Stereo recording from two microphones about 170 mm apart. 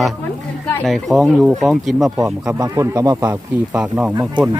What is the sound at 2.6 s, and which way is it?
Speech, 20° right (ahead or behind).